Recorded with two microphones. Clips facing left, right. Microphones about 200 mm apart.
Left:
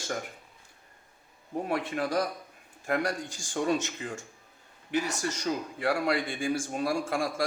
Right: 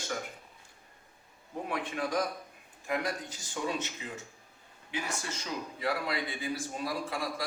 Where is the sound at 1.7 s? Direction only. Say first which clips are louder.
Left 3 dB; 40° left (ahead or behind).